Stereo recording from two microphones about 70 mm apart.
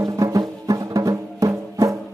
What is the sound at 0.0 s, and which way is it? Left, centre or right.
Music, right.